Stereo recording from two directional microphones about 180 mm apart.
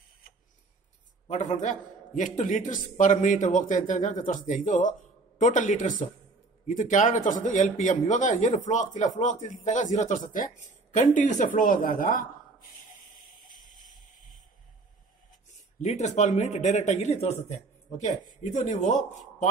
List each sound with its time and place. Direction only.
1.2 s speech: 40° left (ahead or behind)
13.5 s music: 45° left (ahead or behind)
15.8 s speech: 40° left (ahead or behind)